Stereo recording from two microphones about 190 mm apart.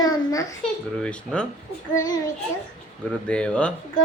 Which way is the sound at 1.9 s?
20° left (ahead or behind).